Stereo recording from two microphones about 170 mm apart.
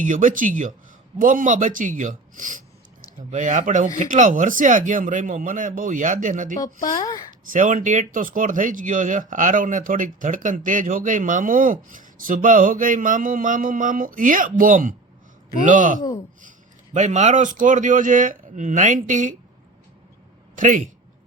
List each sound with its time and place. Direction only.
0.0 s speech: 50° right (ahead or behind)
6.6 s speech: 25° left (ahead or behind)
7.5 s speech: 50° right (ahead or behind)
20.6 s speech: 50° right (ahead or behind)